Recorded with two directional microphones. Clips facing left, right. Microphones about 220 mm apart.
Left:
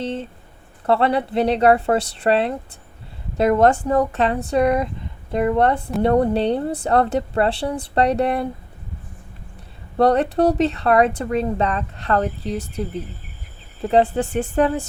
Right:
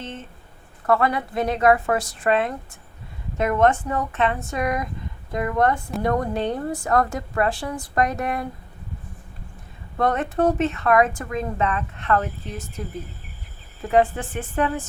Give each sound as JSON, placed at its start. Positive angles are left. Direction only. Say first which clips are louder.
{"t": 0.0, "sound": "a woman's voice", "louder": "left 9 dB", "side_deg": 35}
{"t": 10.0, "sound": "speech", "louder": "left 5 dB", "side_deg": 35}
{"t": 13.8, "sound": "speech", "louder": "left 3 dB", "side_deg": 35}